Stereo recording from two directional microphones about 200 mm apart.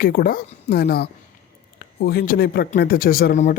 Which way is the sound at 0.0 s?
45° left (ahead or behind).